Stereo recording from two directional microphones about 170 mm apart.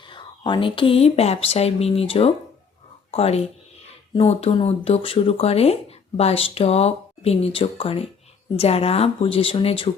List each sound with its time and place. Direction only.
0.1 s speech: 25° left (ahead or behind)